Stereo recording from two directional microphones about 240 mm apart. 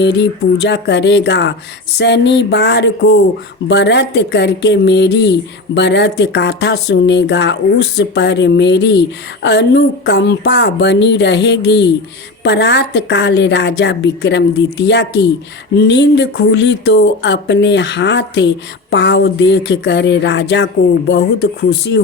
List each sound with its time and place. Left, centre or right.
0.0 s speech: left